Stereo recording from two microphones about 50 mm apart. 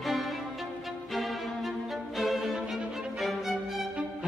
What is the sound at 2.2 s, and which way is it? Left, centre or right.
Music, centre.